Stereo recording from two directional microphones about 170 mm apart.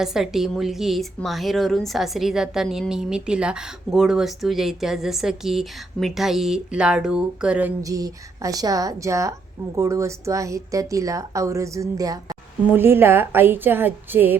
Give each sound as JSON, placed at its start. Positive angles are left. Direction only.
{"t": 0.0, "sound": "a woman's voice", "side_deg": -5}
{"t": 7.8, "sound": "a woman's voice", "side_deg": -20}